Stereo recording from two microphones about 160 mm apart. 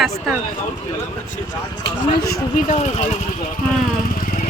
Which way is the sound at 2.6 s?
45° left (ahead or behind).